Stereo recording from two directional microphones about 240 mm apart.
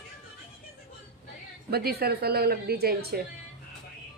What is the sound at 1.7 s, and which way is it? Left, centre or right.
Speech, right.